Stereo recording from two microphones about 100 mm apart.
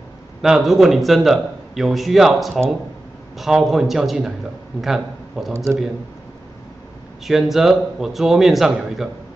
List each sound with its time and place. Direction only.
0.4 s a man's voice: 5° right (ahead or behind)
5.5 s a man's voice: 25° right (ahead or behind)
7.2 s a man's voice: 5° right (ahead or behind)